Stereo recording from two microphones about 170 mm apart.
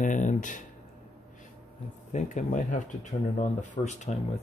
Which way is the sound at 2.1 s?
45° left (ahead or behind).